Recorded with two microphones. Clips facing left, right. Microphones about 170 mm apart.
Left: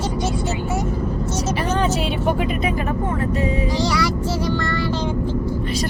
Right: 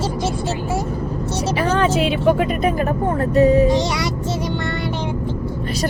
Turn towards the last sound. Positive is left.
turn(degrees=-20)  # may be behind; listen again after turning